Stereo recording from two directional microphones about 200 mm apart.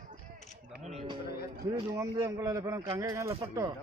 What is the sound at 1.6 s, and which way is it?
A man's voice, 15° right (ahead or behind).